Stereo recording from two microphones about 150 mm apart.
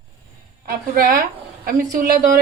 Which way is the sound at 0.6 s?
70° right (ahead or behind).